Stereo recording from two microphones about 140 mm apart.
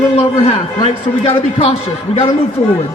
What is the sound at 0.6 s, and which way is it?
A man's voice, 40° left (ahead or behind).